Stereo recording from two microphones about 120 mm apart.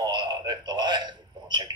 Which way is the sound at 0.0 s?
40° right (ahead or behind).